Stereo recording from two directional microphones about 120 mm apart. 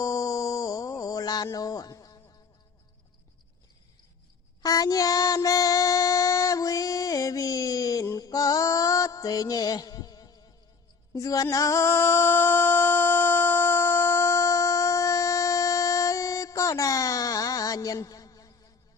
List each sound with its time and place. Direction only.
0.0 s a sound: 30° left (ahead or behind)
4.6 s child singing: 30° left (ahead or behind)
11.1 s music: 30° left (ahead or behind)